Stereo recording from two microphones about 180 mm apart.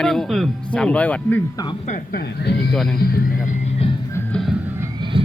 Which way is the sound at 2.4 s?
65° left (ahead or behind).